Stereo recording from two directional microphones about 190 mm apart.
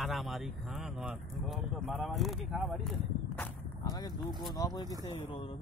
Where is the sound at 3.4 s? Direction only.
20° left (ahead or behind).